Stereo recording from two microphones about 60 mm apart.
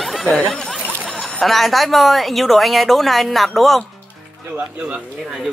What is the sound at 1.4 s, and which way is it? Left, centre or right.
Speech, centre.